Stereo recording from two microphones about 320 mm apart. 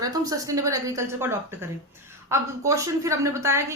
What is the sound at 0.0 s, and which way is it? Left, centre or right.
A woman's voice, centre.